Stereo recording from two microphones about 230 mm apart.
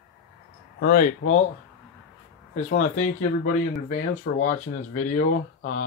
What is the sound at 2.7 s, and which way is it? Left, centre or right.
Speech, left.